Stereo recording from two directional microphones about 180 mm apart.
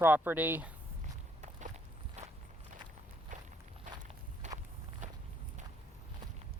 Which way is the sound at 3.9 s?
45° right (ahead or behind).